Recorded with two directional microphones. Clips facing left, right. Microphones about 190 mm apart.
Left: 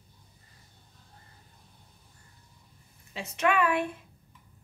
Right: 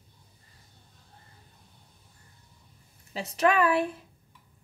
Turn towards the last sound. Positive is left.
turn(degrees=-35)  # may be behind; listen again after turning